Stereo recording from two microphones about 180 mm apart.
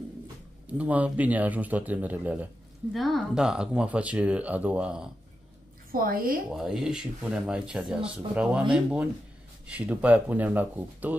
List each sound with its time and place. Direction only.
0.7 s a man's voice: 10° right (ahead or behind)
5.9 s a woman's voice: 55° right (ahead or behind)
6.5 s a man's voice: 5° right (ahead or behind)